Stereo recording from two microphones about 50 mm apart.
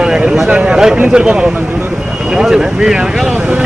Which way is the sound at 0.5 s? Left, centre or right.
Right.